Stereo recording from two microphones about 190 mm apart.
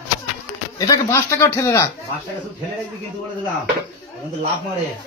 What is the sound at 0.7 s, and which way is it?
A man's voice, 15° left (ahead or behind).